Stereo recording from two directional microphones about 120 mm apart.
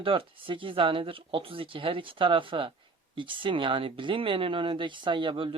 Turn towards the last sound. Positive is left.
turn(degrees=-45)  # may be behind; listen again after turning